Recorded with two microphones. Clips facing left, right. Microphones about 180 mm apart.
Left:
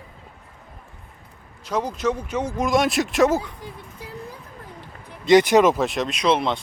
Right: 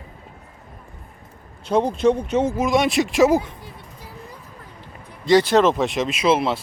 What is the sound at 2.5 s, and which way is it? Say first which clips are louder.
Speech: left 3 dB; centre (ahead or behind).